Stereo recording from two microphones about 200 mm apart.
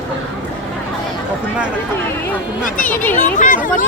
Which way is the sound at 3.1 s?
40° left (ahead or behind).